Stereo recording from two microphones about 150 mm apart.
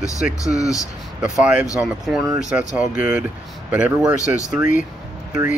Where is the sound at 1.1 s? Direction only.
5° right (ahead or behind).